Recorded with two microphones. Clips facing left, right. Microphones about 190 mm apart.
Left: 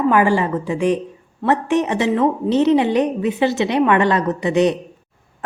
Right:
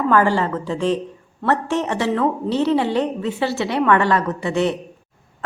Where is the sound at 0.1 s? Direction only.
15° left (ahead or behind).